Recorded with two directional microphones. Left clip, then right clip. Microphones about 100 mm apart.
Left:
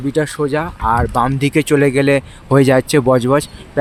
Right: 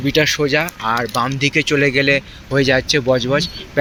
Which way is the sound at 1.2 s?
75° left (ahead or behind).